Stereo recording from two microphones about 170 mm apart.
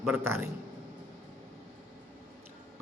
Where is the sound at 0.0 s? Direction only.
10° right (ahead or behind).